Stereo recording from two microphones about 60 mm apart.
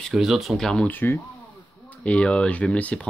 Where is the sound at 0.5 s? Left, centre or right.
Centre.